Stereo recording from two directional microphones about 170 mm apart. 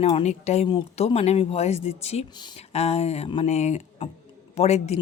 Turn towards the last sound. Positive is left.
turn(degrees=40)  # may be behind; listen again after turning